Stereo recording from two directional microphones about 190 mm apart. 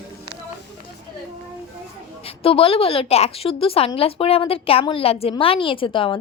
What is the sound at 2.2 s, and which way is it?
A woman's voice, 30° left (ahead or behind).